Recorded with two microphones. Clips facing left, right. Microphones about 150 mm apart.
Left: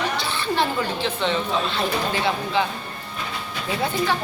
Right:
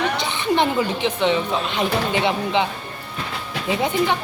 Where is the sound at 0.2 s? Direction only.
15° right (ahead or behind).